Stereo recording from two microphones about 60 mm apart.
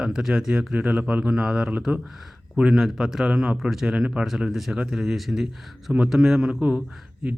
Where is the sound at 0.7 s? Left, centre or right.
Right.